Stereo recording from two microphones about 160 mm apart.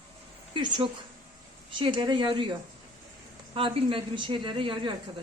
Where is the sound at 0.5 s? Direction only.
30° right (ahead or behind).